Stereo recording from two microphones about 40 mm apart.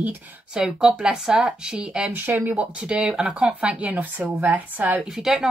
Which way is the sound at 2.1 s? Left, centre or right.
Right.